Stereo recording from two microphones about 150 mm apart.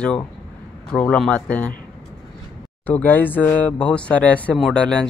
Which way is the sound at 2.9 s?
10° left (ahead or behind).